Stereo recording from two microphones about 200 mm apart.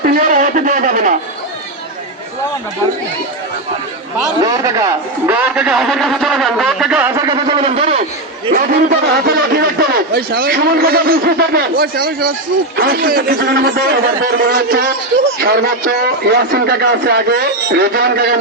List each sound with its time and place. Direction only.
0.0 s a sound: 45° right (ahead or behind)
4.4 s speech: 15° right (ahead or behind)
7.3 s a man's voice: 25° right (ahead or behind)
8.5 s a man's voice: 45° right (ahead or behind)